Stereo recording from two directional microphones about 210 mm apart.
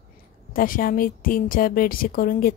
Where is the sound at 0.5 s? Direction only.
45° left (ahead or behind).